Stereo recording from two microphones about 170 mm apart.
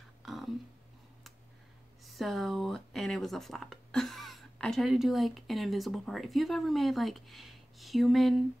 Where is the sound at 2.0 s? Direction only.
Centre (ahead or behind).